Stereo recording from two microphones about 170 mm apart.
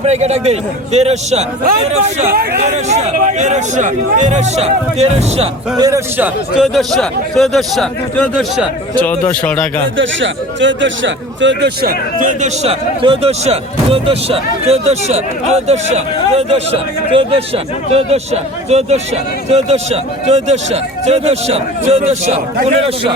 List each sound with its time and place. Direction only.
0.0 s speech: 40° right (ahead or behind)
2.3 s speech: 65° right (ahead or behind)
2.9 s speech: 45° right (ahead or behind)
5.7 s a man's voice: 20° right (ahead or behind)
6.1 s a man's voice: 10° right (ahead or behind); by 9.6 s 5° left (ahead or behind)
10.0 s speech: 90° right; by 12.7 s 45° right (ahead or behind)
13.0 s speech: 35° right (ahead or behind)